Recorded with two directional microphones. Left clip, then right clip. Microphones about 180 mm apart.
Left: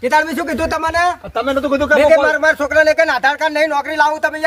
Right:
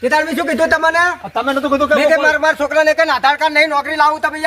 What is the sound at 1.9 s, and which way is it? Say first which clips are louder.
Speech: left 3 dB; 30° left (ahead or behind).